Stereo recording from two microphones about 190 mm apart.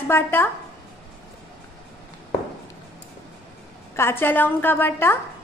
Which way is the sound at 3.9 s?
10° left (ahead or behind).